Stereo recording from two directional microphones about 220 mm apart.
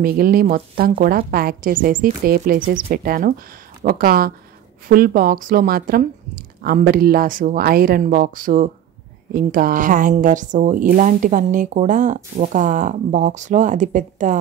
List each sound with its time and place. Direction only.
0.0 s speech: 40° right (ahead or behind)